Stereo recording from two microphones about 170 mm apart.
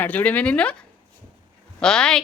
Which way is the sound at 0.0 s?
10° left (ahead or behind).